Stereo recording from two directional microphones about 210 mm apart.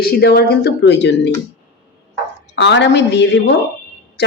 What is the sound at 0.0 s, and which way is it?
Speech, 50° left (ahead or behind).